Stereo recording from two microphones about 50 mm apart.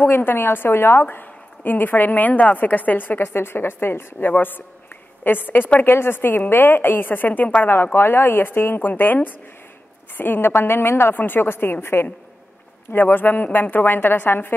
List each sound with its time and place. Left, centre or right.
0.0 s a woman's voice: left
1.1 s a woman's voice: left
7.6 s a woman's voice: left
12.9 s a woman's voice: left